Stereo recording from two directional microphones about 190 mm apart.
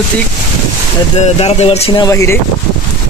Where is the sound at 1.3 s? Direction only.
35° left (ahead or behind); by 2.4 s 15° left (ahead or behind).